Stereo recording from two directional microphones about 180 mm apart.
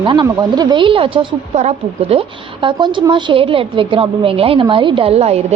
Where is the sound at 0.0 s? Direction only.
25° right (ahead or behind).